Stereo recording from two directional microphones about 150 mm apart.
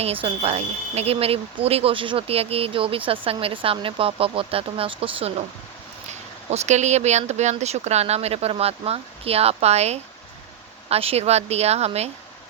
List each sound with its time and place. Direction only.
0.0 s speech: 40° right (ahead or behind)
6.1 s speech: 50° right (ahead or behind)